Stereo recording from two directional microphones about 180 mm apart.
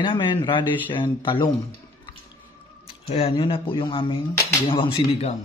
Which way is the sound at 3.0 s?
30° left (ahead or behind).